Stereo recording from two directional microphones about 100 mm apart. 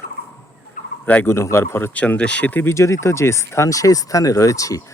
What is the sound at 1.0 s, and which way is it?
Speech, 15° left (ahead or behind).